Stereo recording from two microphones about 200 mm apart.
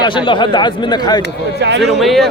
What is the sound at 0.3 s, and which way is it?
Speech, 25° left (ahead or behind).